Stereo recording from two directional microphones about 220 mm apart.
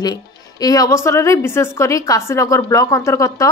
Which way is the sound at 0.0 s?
15° left (ahead or behind).